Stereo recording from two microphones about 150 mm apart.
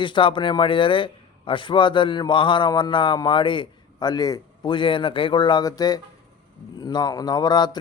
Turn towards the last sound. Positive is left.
turn(degrees=30)  # may be behind; listen again after turning